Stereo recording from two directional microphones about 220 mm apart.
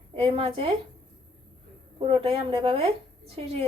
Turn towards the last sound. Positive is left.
turn(degrees=-25)  # may be behind; listen again after turning